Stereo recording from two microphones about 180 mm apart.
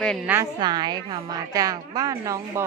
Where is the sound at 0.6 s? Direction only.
20° right (ahead or behind).